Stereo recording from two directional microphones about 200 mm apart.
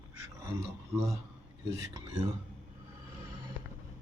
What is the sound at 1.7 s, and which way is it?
Speech, 15° right (ahead or behind).